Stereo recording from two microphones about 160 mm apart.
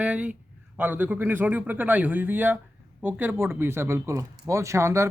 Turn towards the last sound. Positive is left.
turn(degrees=-15)  # may be behind; listen again after turning